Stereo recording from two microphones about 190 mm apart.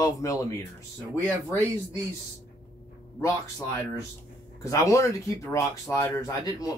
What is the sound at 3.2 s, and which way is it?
Speech, 15° left (ahead or behind).